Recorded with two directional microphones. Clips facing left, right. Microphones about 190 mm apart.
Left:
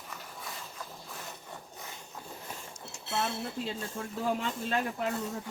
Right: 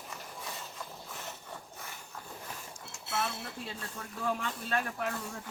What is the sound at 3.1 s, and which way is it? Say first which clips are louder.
Speech: left 3 dB; 25° left (ahead or behind).